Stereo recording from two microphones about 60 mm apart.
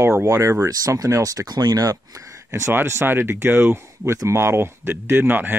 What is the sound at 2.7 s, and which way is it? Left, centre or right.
Speech, right.